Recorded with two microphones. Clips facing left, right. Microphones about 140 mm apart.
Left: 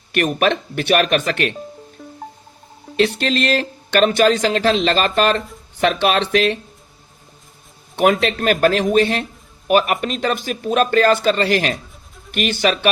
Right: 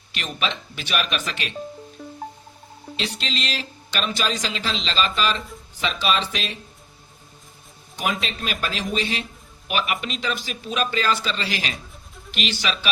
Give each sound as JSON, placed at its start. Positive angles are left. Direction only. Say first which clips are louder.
{"t": 0.1, "sound": "speech", "louder": "left 11 dB", "side_deg": 55}
{"t": 2.9, "sound": "speech", "louder": "left 12 dB", "side_deg": 55}
{"t": 7.9, "sound": "speech", "louder": "left 11 dB", "side_deg": 55}